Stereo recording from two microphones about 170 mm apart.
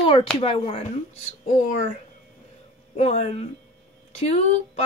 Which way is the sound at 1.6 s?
45° left (ahead or behind).